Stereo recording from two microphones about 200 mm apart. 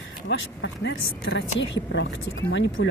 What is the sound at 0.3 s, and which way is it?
Speech, 65° left (ahead or behind).